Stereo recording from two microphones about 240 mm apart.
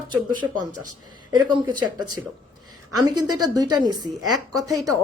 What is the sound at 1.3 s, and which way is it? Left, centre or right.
Speech, centre.